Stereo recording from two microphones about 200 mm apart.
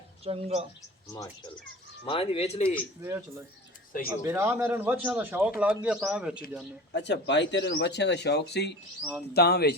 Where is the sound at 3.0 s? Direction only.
15° right (ahead or behind).